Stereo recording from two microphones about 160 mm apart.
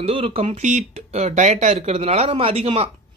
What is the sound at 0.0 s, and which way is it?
Speech, 35° right (ahead or behind).